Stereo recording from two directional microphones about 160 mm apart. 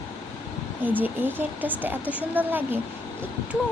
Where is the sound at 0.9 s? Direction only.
10° right (ahead or behind).